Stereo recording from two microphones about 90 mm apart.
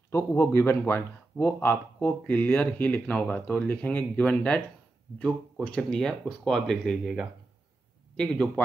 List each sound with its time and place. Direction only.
0.1 s a man's voice: 30° left (ahead or behind); by 8.5 s 10° left (ahead or behind)